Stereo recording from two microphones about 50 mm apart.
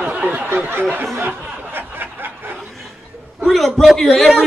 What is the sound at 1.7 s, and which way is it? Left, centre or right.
Snicker, right.